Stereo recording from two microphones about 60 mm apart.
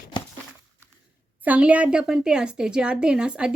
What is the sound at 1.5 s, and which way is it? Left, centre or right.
A woman's voice, right.